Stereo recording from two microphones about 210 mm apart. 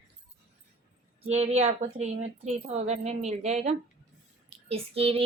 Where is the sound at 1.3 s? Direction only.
30° right (ahead or behind).